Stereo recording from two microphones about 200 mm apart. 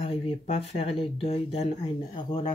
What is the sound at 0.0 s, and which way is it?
Speech, 30° left (ahead or behind).